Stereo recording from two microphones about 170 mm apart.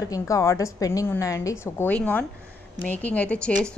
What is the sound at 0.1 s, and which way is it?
A woman's voice, 20° left (ahead or behind).